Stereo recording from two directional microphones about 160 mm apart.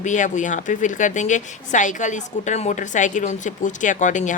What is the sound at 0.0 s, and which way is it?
Speech, 50° left (ahead or behind).